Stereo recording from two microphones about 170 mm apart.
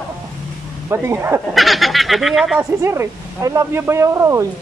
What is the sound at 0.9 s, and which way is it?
Speech, 15° right (ahead or behind).